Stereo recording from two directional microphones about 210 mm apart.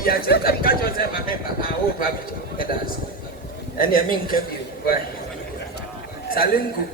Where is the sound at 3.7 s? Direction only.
40° left (ahead or behind).